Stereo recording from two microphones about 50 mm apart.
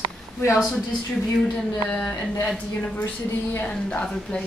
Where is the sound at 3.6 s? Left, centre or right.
Left.